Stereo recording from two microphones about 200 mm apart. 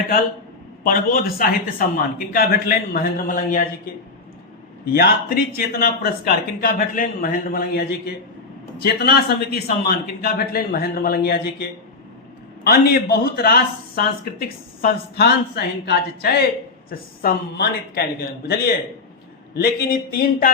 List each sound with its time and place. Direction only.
0.9 s speech: 45° left (ahead or behind)
4.9 s speech: 50° left (ahead or behind)
12.6 s speech: 50° left (ahead or behind)